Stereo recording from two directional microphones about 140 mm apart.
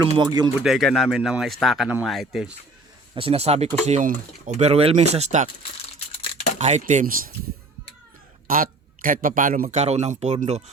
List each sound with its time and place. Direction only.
0.2 s speech: 30° right (ahead or behind)
0.6 s speech: centre (ahead or behind)
3.2 s speech: 45° right (ahead or behind)
3.8 s speech: 60° right (ahead or behind)
6.1 s a sound: 55° left (ahead or behind)
6.6 s speech: 55° right (ahead or behind); by 7.3 s 90° right
8.4 s speech: 85° right
9.6 s speech: 50° right (ahead or behind)